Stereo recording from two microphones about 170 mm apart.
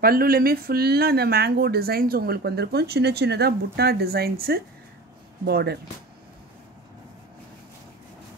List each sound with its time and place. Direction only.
0.0 s speech: 60° right (ahead or behind)